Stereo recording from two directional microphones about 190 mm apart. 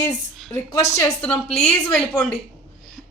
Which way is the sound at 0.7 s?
15° left (ahead or behind).